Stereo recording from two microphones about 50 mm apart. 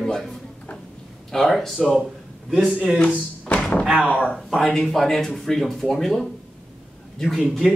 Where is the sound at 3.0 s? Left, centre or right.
Left.